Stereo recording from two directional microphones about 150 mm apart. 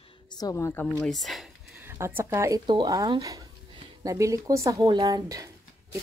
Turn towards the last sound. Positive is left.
turn(degrees=-25)  # may be behind; listen again after turning